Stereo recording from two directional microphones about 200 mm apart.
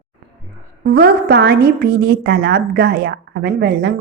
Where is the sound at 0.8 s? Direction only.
50° right (ahead or behind).